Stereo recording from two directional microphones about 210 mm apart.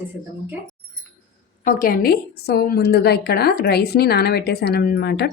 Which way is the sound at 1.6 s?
40° left (ahead or behind).